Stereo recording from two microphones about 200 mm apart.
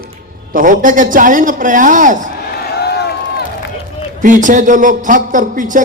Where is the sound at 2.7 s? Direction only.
55° left (ahead or behind).